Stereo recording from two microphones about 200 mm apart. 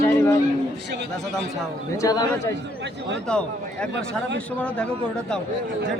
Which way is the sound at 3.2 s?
5° left (ahead or behind).